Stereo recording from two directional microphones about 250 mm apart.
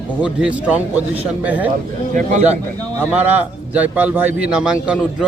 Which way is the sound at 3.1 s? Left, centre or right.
Centre.